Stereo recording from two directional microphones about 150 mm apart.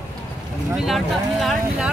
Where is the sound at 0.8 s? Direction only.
Centre (ahead or behind).